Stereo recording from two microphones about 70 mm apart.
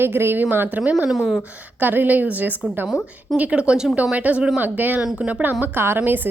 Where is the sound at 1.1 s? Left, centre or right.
Centre.